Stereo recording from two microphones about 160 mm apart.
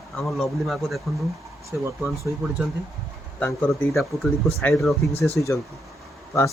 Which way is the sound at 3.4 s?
15° left (ahead or behind).